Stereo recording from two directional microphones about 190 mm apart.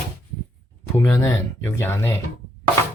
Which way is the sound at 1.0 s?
15° left (ahead or behind).